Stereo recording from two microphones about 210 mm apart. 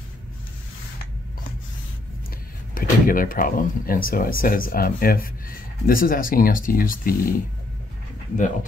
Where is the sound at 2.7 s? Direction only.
40° left (ahead or behind).